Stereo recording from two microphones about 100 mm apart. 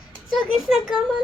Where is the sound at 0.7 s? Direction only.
5° right (ahead or behind).